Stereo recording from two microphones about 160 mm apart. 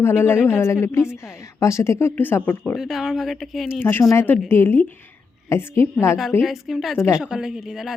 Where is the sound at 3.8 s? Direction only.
15° left (ahead or behind).